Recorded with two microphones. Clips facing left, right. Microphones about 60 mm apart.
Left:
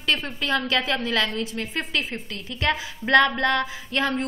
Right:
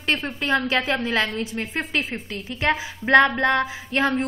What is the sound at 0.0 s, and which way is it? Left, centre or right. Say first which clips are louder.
A woman's voice: right 1 dB; right.